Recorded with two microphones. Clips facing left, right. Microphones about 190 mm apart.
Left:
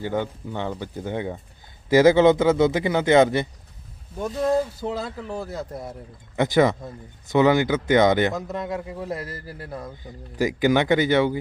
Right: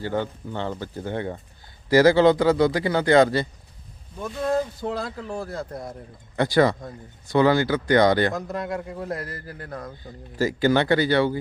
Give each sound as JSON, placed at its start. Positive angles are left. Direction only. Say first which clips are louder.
{"t": 0.0, "sound": "a man's voice", "louder": "even", "side_deg": 15}
{"t": 4.5, "sound": "speech", "louder": "left 1 dB", "side_deg": 5}
{"t": 6.3, "sound": "a man's voice", "louder": "even", "side_deg": 20}
{"t": 8.3, "sound": "speech", "louder": "even", "side_deg": 0}
{"t": 10.0, "sound": "speech", "louder": "left 1 dB", "side_deg": 15}